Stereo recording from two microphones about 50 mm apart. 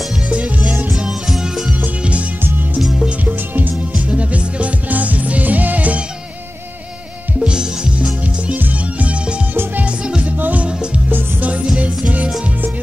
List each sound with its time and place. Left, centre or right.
0.3 s music: right
0.9 s music: centre
3.3 s music: right
7.3 s music: centre
8.5 s music: right
9.5 s music: right
10.7 s music: centre
11.1 s music: right